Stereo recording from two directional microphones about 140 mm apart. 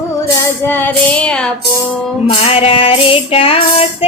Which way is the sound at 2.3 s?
40° left (ahead or behind).